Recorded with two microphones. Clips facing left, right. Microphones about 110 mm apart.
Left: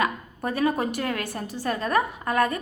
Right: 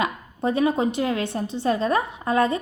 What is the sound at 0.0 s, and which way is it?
A woman's voice, 25° right (ahead or behind).